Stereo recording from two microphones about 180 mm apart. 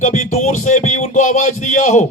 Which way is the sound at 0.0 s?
40° left (ahead or behind).